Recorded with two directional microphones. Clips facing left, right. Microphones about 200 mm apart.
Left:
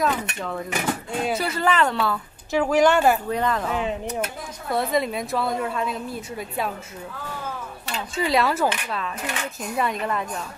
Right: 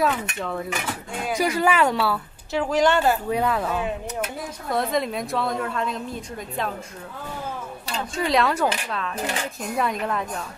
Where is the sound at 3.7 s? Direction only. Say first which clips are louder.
Left 1 dB; 15° left (ahead or behind).